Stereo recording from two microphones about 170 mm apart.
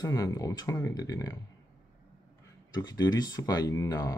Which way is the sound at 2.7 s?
25° left (ahead or behind).